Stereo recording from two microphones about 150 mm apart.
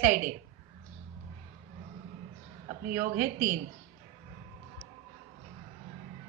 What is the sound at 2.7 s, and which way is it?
Speech, 55° right (ahead or behind).